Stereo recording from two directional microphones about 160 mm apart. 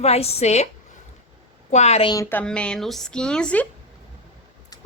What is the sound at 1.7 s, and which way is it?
Speech, 45° left (ahead or behind).